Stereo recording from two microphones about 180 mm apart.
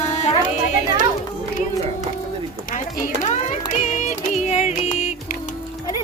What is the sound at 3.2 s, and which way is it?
Music, 40° left (ahead or behind).